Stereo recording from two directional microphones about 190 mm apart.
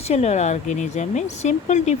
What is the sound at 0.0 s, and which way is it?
Speech, 35° left (ahead or behind).